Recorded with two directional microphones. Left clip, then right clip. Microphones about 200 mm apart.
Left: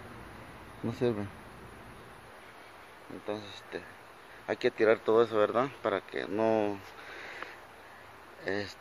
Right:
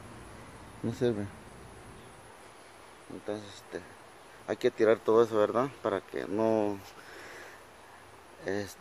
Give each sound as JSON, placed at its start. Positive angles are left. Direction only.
{"t": 0.8, "sound": "speech", "side_deg": -30}
{"t": 3.3, "sound": "speech", "side_deg": -30}
{"t": 5.5, "sound": "speech", "side_deg": -35}
{"t": 8.5, "sound": "speech", "side_deg": -45}